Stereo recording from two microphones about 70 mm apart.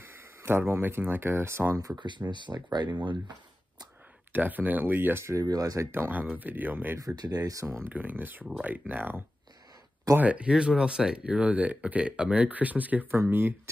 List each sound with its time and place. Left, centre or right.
0.0 s a sound: right
0.7 s speech: right
1.8 s speech: right
4.3 s speech: right
5.5 s speech: right
5.8 s speech: right
7.2 s speech: right
7.9 s speech: right
13.1 s speech: right